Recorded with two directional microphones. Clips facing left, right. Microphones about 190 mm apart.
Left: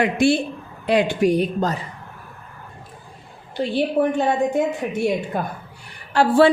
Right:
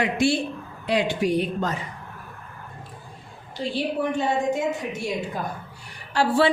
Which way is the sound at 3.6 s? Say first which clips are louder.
Left 6 dB; 60° left (ahead or behind).